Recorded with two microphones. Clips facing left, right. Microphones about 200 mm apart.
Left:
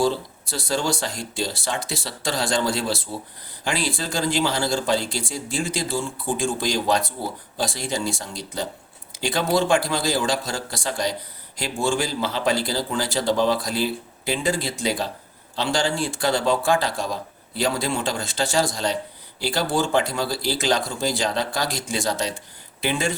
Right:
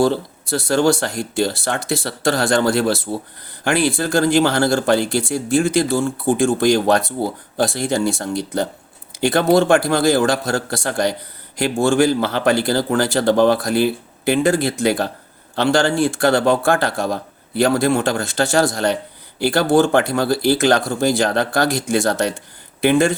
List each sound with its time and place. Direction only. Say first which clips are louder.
0.0 s speech: right 5 dB; 65° right (ahead or behind)